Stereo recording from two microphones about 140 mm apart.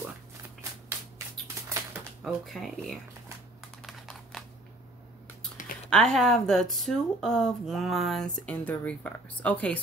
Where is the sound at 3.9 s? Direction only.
Centre (ahead or behind).